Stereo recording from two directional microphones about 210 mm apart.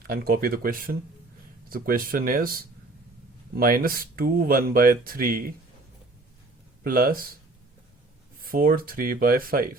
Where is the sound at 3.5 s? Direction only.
45° right (ahead or behind).